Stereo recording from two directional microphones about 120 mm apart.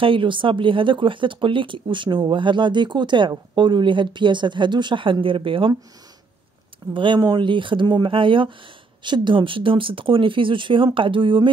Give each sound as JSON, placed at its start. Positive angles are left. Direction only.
{"t": 0.0, "sound": "speech", "side_deg": -45}
{"t": 6.9, "sound": "speech", "side_deg": -45}